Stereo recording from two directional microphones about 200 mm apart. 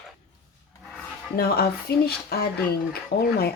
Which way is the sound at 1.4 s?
50° left (ahead or behind).